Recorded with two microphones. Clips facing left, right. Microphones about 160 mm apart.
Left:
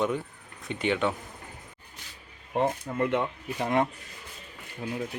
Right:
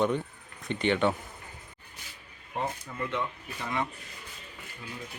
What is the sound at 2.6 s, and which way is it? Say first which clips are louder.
Speech: left 7 dB; 60° left (ahead or behind).